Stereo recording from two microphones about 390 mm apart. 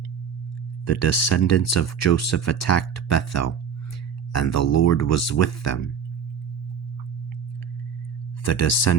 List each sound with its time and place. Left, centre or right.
0.9 s speech: left
8.4 s speech: left